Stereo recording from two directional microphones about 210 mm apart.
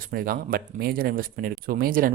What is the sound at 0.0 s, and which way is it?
Speech, 45° right (ahead or behind).